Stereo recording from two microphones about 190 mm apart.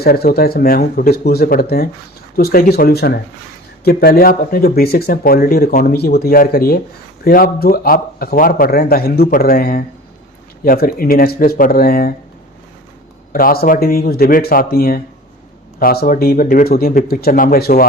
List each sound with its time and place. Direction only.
0.0 s speech: 55° left (ahead or behind)
13.3 s speech: 50° left (ahead or behind)